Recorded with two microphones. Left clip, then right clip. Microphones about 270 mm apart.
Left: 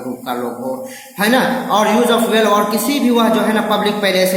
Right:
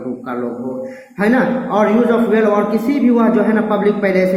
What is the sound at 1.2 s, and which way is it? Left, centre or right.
A woman's voice, centre.